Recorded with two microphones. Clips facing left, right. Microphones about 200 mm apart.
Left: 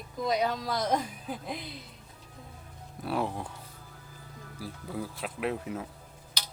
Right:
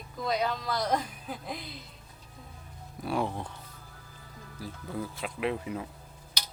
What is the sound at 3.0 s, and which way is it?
Speech, centre (ahead or behind).